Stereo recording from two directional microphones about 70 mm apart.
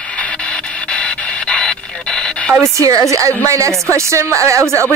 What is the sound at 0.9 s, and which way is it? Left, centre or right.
Radio, centre.